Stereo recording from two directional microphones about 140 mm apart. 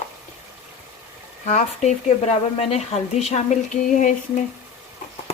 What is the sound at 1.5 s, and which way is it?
Speech, 55° left (ahead or behind).